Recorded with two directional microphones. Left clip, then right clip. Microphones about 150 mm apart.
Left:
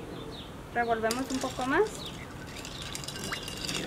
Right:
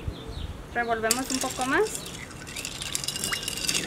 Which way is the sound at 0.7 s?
5° right (ahead or behind).